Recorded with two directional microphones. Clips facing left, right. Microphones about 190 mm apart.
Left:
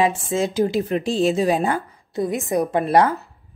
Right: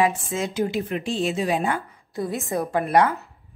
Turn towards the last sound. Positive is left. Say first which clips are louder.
# left 3 dB
turn(degrees=35)  # may be behind; listen again after turning